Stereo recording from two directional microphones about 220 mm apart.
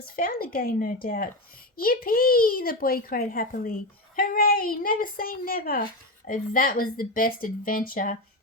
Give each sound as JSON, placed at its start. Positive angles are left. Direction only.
{"t": 0.0, "sound": "speech", "side_deg": 40}